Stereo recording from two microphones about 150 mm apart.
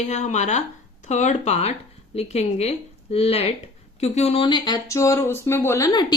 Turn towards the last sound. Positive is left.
turn(degrees=20)  # may be behind; listen again after turning